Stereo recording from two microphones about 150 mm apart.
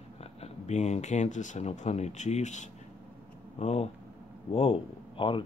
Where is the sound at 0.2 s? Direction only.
45° left (ahead or behind).